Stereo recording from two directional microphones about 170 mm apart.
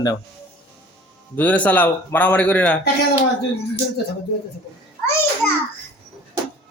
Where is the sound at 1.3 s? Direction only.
10° left (ahead or behind).